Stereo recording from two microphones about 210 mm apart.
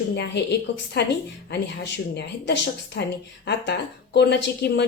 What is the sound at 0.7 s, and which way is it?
A woman's voice, 55° left (ahead or behind).